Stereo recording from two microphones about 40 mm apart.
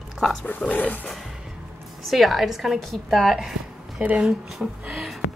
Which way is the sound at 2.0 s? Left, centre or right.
Centre.